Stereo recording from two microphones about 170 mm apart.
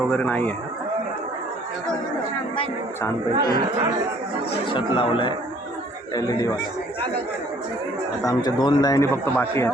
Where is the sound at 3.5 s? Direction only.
25° right (ahead or behind).